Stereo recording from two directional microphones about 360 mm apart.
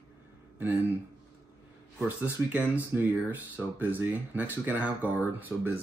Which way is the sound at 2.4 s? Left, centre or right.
Centre.